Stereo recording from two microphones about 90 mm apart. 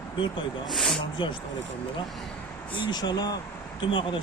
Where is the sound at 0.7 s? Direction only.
5° left (ahead or behind).